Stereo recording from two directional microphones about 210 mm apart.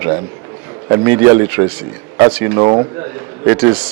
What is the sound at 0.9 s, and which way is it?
A man's voice, 15° right (ahead or behind).